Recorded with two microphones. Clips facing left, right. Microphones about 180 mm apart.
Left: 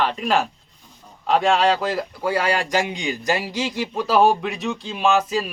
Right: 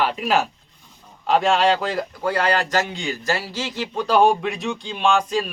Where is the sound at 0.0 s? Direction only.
5° right (ahead or behind).